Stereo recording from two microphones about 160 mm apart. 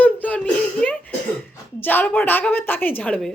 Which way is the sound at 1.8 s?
10° left (ahead or behind).